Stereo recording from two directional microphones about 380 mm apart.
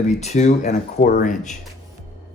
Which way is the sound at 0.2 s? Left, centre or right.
Centre.